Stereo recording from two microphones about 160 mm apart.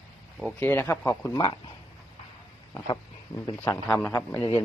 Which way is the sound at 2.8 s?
30° left (ahead or behind).